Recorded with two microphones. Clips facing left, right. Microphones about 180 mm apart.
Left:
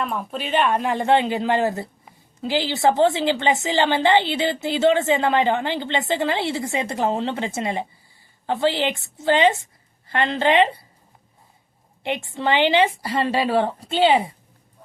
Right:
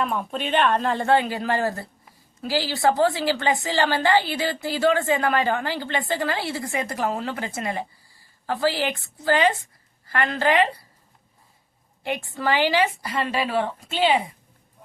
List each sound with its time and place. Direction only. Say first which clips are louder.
0.0 s a woman's voice: right 1 dB; centre (ahead or behind); by 10.8 s 25° left (ahead or behind)
12.0 s a woman's voice: left 2 dB; 25° left (ahead or behind)